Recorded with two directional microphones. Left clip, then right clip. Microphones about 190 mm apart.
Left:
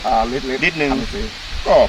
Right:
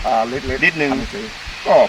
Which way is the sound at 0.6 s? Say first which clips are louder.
Right 2 dB; 10° left (ahead or behind).